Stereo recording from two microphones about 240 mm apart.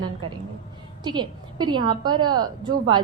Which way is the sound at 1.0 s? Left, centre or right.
Centre.